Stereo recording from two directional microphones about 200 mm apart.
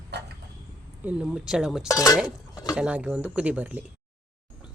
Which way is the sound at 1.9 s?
15° left (ahead or behind).